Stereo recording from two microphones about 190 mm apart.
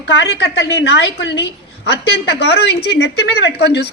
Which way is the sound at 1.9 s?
60° left (ahead or behind).